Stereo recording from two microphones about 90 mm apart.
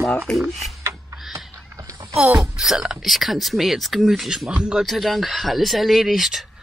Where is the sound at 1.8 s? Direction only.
40° right (ahead or behind).